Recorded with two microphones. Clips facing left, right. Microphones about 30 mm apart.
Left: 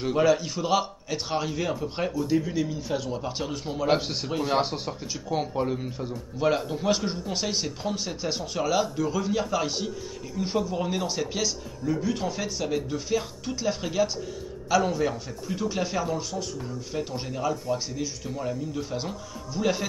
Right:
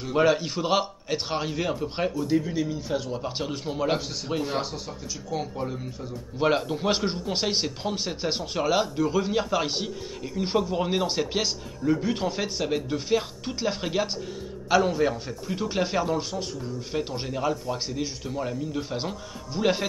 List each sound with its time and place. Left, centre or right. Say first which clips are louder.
0.1 s a man's voice: right 1 dB; right
4.0 s speech: left 1 dB; left
6.6 s speech: even; centre